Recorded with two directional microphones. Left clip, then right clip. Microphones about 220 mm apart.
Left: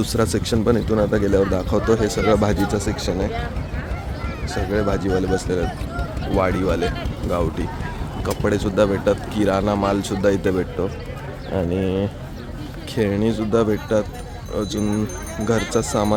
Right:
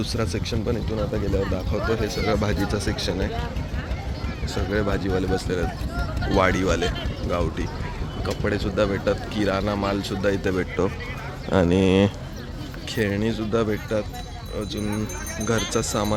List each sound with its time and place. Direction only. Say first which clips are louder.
0.0 s speech: left 6 dB; 25° left (ahead or behind); by 3.2 s 10° left (ahead or behind)
4.5 s speech: left 3 dB; 10° left (ahead or behind)
11.5 s speech: right 3 dB; 10° right (ahead or behind)
13.0 s speech: left 4 dB; 10° left (ahead or behind)
15.7 s speech: left 4 dB; 10° left (ahead or behind)